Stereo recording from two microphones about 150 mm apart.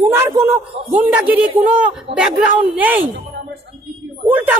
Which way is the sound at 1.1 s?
10° right (ahead or behind).